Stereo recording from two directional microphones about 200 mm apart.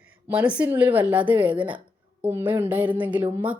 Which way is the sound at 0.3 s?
5° right (ahead or behind).